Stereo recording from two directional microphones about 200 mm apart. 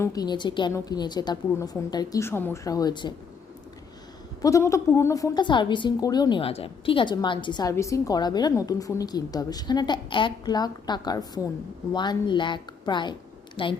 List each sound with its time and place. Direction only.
0.0 s a woman's voice: 20° left (ahead or behind)
4.4 s a woman's voice: 15° left (ahead or behind)